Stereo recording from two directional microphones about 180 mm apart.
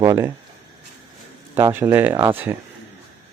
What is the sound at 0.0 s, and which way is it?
Speech, 15° right (ahead or behind).